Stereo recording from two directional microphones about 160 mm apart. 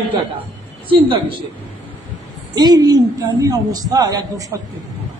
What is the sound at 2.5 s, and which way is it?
A man's voice, 25° right (ahead or behind).